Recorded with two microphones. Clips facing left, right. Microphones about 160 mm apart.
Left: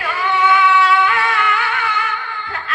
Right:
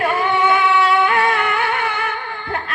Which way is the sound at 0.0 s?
55° right (ahead or behind).